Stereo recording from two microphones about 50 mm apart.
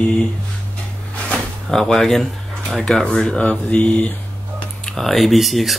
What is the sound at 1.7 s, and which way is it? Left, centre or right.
Speech, centre.